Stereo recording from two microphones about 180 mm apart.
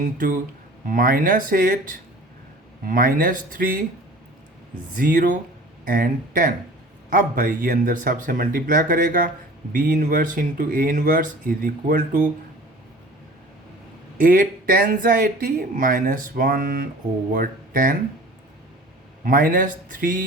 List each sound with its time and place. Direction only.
0.0 s speech: 50° right (ahead or behind)
4.9 s speech: 50° right (ahead or behind)
14.2 s speech: 50° right (ahead or behind)
19.2 s speech: 50° right (ahead or behind)